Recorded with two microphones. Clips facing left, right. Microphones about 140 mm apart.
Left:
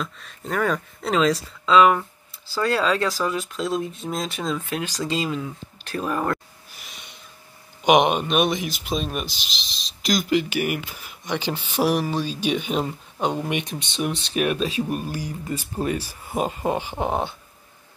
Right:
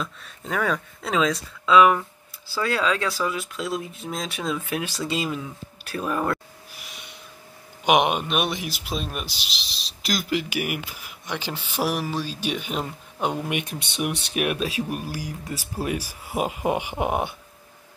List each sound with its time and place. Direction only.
0.0 s speech: centre (ahead or behind)